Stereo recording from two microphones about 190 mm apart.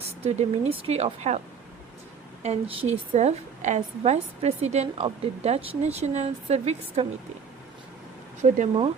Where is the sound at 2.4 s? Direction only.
30° right (ahead or behind).